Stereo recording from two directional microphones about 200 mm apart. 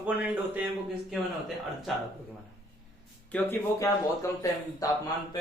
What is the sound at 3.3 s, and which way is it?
Speech, 15° left (ahead or behind).